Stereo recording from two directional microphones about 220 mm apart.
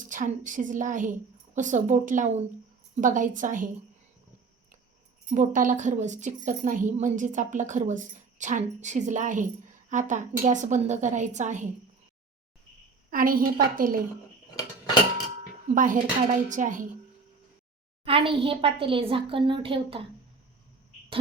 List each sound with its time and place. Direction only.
0.1 s a woman's voice: 35° right (ahead or behind)
5.3 s a woman's voice: 35° right (ahead or behind)
13.1 s a woman's voice: 40° right (ahead or behind)
15.7 s a woman's voice: 35° right (ahead or behind)
18.0 s a woman's voice: 25° right (ahead or behind)